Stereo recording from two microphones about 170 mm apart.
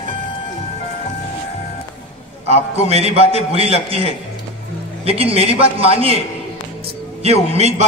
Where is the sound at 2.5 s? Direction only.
35° right (ahead or behind).